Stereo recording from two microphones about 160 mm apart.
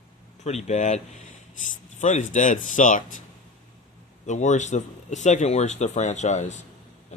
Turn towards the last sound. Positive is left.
turn(degrees=45)  # may be behind; listen again after turning